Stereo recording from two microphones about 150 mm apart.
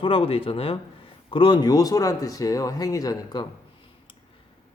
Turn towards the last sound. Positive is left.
turn(degrees=25)  # may be behind; listen again after turning